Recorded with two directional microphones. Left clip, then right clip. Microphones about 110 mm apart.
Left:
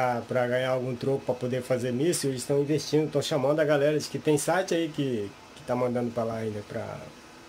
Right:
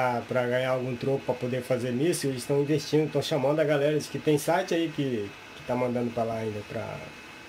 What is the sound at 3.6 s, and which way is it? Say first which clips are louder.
Speech: left 1 dB; 35° left (ahead or behind).